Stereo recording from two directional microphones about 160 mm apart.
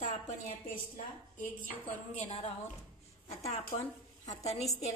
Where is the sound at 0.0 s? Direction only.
55° left (ahead or behind).